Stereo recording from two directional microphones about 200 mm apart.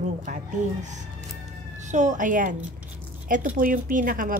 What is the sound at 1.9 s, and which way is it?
Speech, 35° right (ahead or behind).